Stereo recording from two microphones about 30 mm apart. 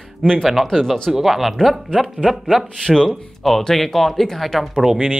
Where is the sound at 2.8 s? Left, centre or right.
Centre.